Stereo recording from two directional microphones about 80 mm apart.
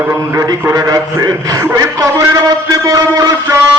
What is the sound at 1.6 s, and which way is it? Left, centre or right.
Mantra, right.